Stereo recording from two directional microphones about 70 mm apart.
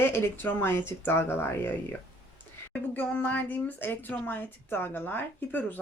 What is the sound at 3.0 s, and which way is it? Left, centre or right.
A woman's voice, left.